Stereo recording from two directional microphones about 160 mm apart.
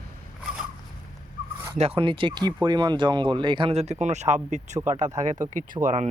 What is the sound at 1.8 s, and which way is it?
Speech, 35° right (ahead or behind).